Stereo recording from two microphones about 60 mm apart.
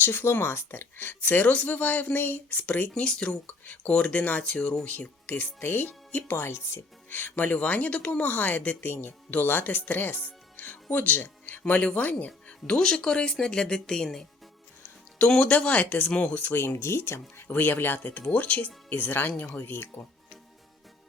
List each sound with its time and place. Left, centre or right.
0.0 s speech: left
2.9 s speech: centre
3.4 s speech: left
6.5 s speech: left
7.1 s speech: left; by 14.3 s centre
15.3 s speech: centre; by 20.1 s left